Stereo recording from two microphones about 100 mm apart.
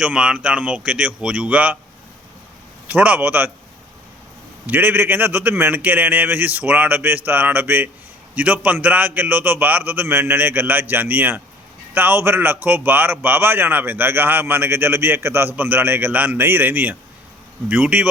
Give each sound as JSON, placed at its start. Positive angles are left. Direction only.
{"t": 0.0, "sound": "speech", "side_deg": -10}
{"t": 2.8, "sound": "speech", "side_deg": -15}
{"t": 4.6, "sound": "a man's voice", "side_deg": -20}